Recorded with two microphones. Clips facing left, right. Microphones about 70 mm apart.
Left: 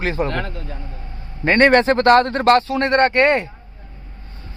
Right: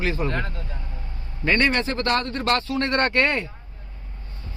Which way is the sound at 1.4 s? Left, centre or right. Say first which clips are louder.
Left 7 dB; left.